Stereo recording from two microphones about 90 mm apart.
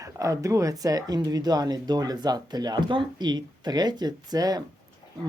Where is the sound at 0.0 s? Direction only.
40° right (ahead or behind).